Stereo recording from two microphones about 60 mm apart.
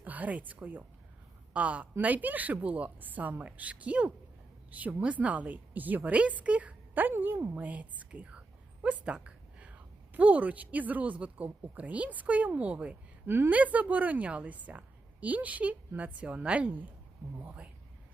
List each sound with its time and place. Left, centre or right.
0.0 s a woman's voice: right
13.2 s a woman's voice: right
13.5 s a woman's voice: right